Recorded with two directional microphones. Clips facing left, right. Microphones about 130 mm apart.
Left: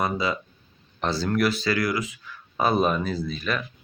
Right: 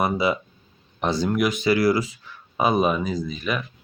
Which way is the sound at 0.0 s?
25° right (ahead or behind).